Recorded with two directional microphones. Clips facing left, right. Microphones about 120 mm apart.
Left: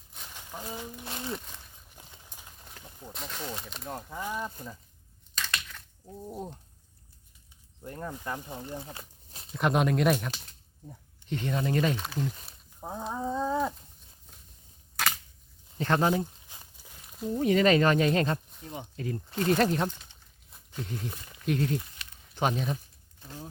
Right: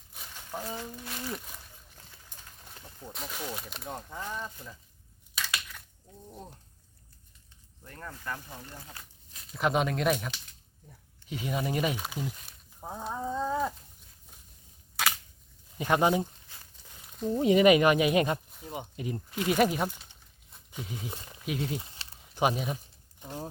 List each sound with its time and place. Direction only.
0.5 s speech: 10° right (ahead or behind)
1.0 s speech: 25° left (ahead or behind)
2.0 s a sound: 20° left (ahead or behind)
3.1 s speech: 5° right (ahead or behind)
5.3 s a sound: 10° right (ahead or behind)
7.9 s speech: 20° left (ahead or behind)
9.6 s speech: centre (ahead or behind)
15.8 s speech: 10° right (ahead or behind)
16.7 s a sound: 5° left (ahead or behind)
17.3 s speech: 15° right (ahead or behind)
21.1 s speech: 25° right (ahead or behind)
21.4 s speech: 5° right (ahead or behind)
21.8 s a sound: 30° right (ahead or behind)
22.4 s speech: 10° right (ahead or behind)